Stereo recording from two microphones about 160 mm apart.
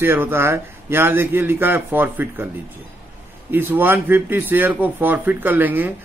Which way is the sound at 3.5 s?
15° right (ahead or behind).